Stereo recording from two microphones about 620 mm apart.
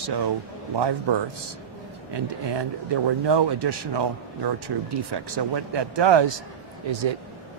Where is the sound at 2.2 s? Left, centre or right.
Right.